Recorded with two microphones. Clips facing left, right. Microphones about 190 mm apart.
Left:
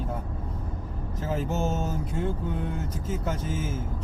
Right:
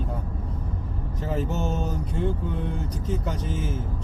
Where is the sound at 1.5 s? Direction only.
40° left (ahead or behind).